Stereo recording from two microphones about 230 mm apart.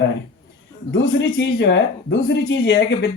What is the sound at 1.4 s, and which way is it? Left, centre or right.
Speech, left.